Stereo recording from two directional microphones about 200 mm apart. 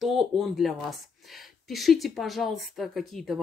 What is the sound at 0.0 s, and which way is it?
Speech, centre (ahead or behind).